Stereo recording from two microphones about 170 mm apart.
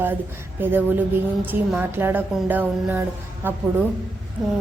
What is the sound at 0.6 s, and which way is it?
Music, 10° right (ahead or behind).